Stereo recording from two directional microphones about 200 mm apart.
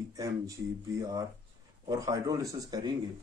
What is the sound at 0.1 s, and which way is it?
Speech, 15° right (ahead or behind).